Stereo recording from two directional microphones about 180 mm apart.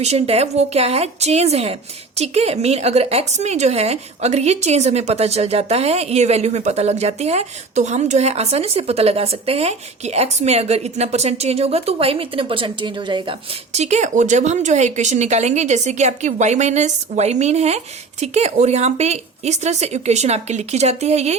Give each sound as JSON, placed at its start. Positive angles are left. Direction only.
{"t": 0.0, "sound": "a woman's voice", "side_deg": -35}